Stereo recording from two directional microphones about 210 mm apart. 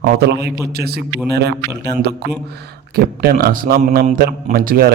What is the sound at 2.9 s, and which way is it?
A man's voice, 45° right (ahead or behind).